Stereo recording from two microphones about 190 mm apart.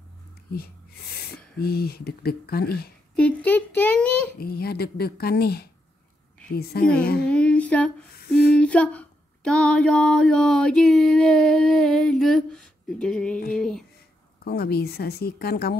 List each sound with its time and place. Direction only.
0.5 s speech: 55° left (ahead or behind)
3.2 s child singing: 10° left (ahead or behind)
4.4 s speech: 55° left (ahead or behind)
7.2 s humming: 5° left (ahead or behind)
8.3 s a sound: 5° left (ahead or behind)
14.4 s speech: 55° left (ahead or behind)